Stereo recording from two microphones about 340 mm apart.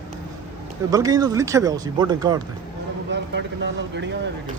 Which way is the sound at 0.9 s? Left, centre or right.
Centre.